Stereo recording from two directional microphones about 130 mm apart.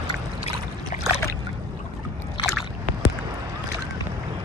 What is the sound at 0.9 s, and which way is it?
Boat, 70° left (ahead or behind).